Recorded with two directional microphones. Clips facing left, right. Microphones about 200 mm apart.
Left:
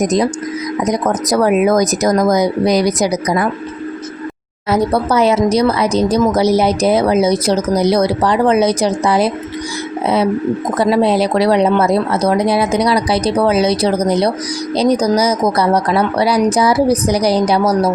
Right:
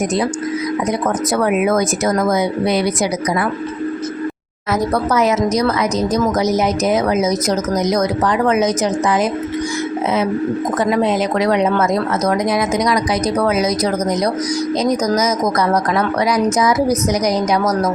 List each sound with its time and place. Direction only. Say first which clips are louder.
0.0 s speech: left 3 dB; 40° left (ahead or behind)
4.7 s speech: left 3 dB; 30° left (ahead or behind)
10.8 s speech: left 4 dB; 35° left (ahead or behind)